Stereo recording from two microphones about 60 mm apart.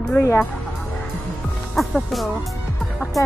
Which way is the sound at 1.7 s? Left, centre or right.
Centre.